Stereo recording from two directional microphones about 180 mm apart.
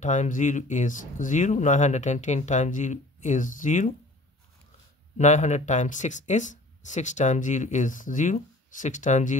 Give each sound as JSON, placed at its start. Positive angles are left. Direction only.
{"t": 0.0, "sound": "speech", "side_deg": 40}
{"t": 5.1, "sound": "speech", "side_deg": 40}